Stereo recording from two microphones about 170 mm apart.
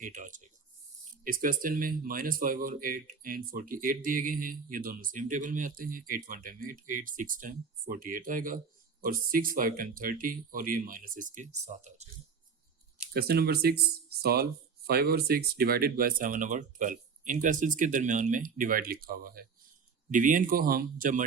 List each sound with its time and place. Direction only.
0.0 s speech: 50° right (ahead or behind)
13.1 s speech: 65° right (ahead or behind)